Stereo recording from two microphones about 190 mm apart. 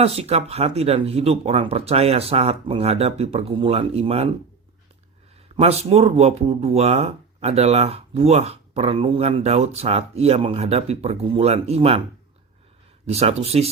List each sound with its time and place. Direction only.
0.0 s speech: 30° right (ahead or behind)
5.5 s speech: 35° right (ahead or behind)
13.1 s speech: 35° right (ahead or behind)